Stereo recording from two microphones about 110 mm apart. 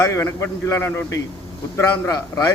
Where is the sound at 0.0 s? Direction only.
25° left (ahead or behind).